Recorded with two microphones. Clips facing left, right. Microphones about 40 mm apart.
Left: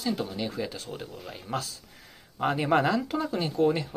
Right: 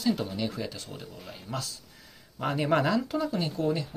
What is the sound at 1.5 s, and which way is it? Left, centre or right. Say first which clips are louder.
Speech: left 4 dB; left.